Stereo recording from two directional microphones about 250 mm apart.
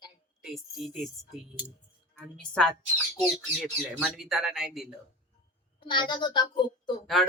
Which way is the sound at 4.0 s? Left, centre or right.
Centre.